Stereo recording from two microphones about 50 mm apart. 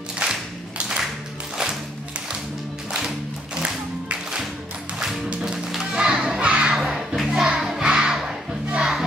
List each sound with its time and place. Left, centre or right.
0.2 s clapping: centre
4.9 s music: centre
5.4 s music: centre
5.9 s children playing: centre
6.7 s music: centre